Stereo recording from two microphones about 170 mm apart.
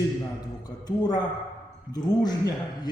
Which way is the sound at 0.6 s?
25° left (ahead or behind).